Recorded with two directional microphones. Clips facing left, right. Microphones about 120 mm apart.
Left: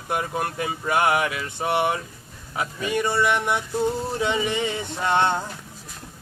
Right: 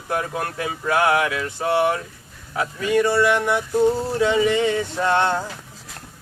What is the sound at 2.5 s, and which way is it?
Music, 20° left (ahead or behind).